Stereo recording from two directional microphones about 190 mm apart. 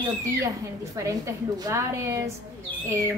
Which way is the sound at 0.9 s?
15° right (ahead or behind).